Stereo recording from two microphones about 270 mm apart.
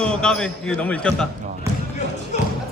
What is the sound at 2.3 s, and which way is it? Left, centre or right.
Music, left.